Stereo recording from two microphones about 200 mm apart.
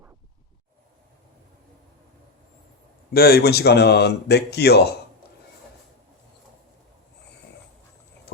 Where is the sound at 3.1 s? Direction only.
50° left (ahead or behind).